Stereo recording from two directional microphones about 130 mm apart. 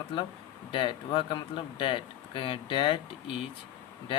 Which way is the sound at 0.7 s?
40° left (ahead or behind).